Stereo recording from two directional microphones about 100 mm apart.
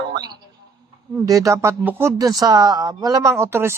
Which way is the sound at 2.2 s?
40° right (ahead or behind).